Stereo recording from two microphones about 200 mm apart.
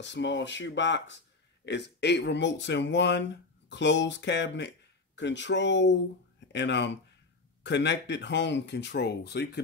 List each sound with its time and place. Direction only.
0.0 s speech: 65° left (ahead or behind)